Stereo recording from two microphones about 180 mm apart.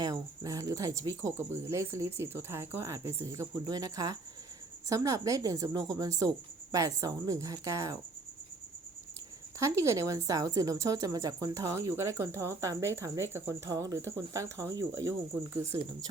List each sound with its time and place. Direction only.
0.0 s speech: 20° right (ahead or behind)
9.6 s speech: 15° right (ahead or behind)